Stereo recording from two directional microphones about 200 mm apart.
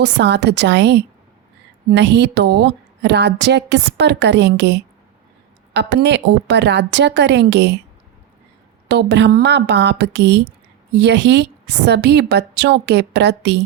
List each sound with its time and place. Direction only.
0.0 s a woman's voice: 60° right (ahead or behind)
8.9 s a woman's voice: 60° right (ahead or behind)